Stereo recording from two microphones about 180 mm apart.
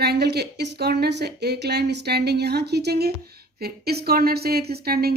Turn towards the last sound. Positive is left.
turn(degrees=-60)  # may be behind; listen again after turning